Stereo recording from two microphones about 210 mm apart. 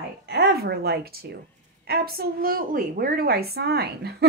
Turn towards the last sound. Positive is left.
turn(degrees=-50)  # may be behind; listen again after turning